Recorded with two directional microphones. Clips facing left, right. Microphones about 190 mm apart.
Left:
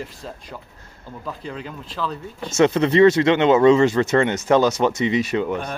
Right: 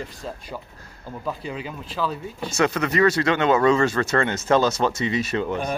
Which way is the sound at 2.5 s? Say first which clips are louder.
Left 6 dB; 25° left (ahead or behind).